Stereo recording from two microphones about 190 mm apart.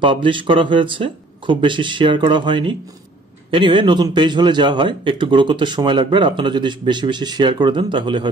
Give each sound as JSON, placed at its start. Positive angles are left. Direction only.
{"t": 0.0, "sound": "a man's voice", "side_deg": -25}